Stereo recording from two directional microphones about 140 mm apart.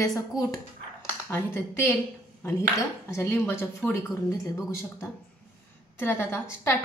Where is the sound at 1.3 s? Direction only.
15° left (ahead or behind).